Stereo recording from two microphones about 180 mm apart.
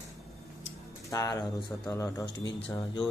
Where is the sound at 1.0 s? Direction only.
20° left (ahead or behind).